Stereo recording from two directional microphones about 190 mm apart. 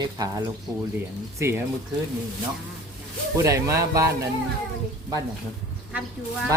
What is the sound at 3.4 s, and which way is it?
Speech, 15° right (ahead or behind).